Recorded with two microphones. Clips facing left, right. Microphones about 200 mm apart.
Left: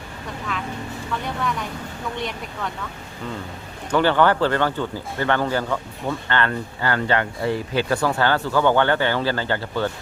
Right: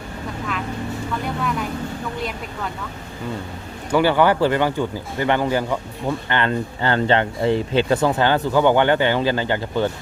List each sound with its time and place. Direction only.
3.9 s speech: 10° right (ahead or behind)